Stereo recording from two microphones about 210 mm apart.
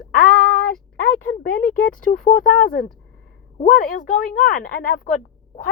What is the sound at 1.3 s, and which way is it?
A woman's voice, 45° left (ahead or behind).